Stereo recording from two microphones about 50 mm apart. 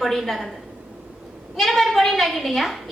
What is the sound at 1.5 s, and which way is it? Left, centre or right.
A woman's voice, centre.